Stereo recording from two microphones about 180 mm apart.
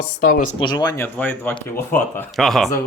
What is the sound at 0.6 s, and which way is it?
Speech, 25° left (ahead or behind).